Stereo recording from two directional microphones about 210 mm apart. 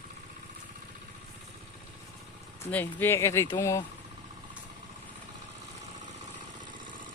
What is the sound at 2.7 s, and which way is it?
Speech, 10° left (ahead or behind).